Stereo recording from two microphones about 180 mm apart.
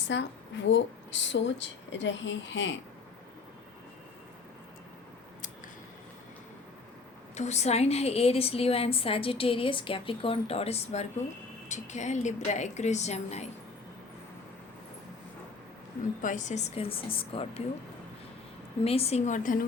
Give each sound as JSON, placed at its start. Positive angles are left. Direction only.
{"t": 0.1, "sound": "a woman's voice", "side_deg": 85}
{"t": 7.3, "sound": "a woman's voice", "side_deg": 40}
{"t": 16.2, "sound": "a woman's voice", "side_deg": 45}
{"t": 18.9, "sound": "a woman's voice", "side_deg": 35}